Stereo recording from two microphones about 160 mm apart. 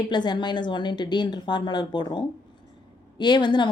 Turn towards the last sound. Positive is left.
turn(degrees=30)  # may be behind; listen again after turning